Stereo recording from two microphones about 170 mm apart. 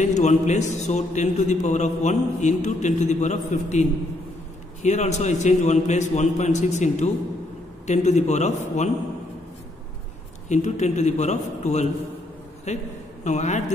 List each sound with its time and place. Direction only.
0.0 s a man's voice: 45° left (ahead or behind)
4.8 s a man's voice: 45° left (ahead or behind)
10.5 s a man's voice: 45° left (ahead or behind)